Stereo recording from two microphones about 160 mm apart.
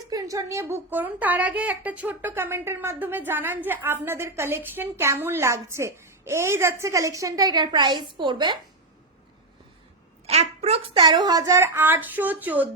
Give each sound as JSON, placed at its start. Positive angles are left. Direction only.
{"t": 0.1, "sound": "speech", "side_deg": -25}
{"t": 10.2, "sound": "a woman's voice", "side_deg": -40}